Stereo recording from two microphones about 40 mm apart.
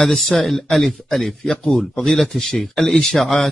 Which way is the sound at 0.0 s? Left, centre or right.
Centre.